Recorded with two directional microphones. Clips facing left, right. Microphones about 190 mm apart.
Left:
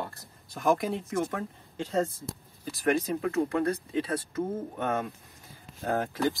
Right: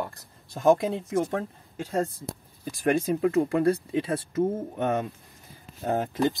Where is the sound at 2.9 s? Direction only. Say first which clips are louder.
Right 4 dB; 25° right (ahead or behind).